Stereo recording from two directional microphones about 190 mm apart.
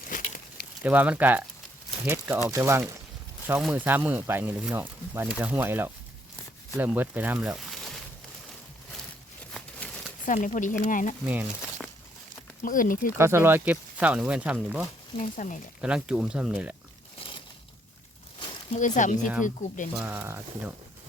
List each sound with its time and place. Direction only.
0.1 s a sound: 45° left (ahead or behind)
0.8 s speech: 10° right (ahead or behind)
10.2 s speech: 40° left (ahead or behind)
11.3 s a sound: 10° right (ahead or behind)
12.6 s speech: 45° left (ahead or behind)
13.1 s speech: 15° right (ahead or behind)
15.1 s speech: 40° left (ahead or behind)
15.8 s speech: 5° right (ahead or behind)
17.2 s a sound: 25° left (ahead or behind)
18.8 s speech: 40° left (ahead or behind)
20.0 s speech: 10° right (ahead or behind)